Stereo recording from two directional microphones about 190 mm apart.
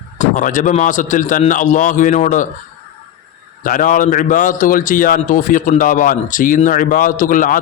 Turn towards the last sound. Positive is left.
turn(degrees=45)  # may be behind; listen again after turning